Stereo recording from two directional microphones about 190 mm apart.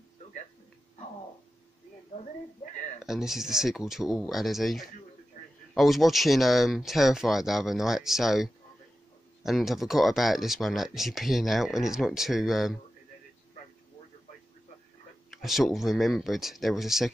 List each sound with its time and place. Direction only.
3.0 s speech: centre (ahead or behind)
15.3 s speech: centre (ahead or behind)